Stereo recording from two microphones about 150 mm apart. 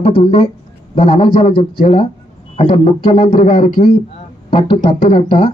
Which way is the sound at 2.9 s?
35° left (ahead or behind).